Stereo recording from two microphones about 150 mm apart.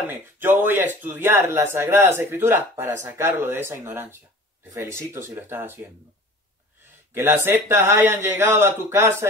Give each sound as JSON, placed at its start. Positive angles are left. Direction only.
{"t": 0.1, "sound": "a man's voice", "side_deg": -15}
{"t": 7.2, "sound": "a man's voice", "side_deg": -15}